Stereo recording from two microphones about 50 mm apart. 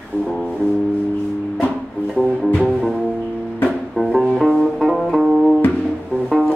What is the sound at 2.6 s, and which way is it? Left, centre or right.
Music, centre.